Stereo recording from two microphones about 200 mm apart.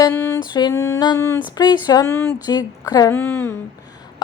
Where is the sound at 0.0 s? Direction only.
10° left (ahead or behind).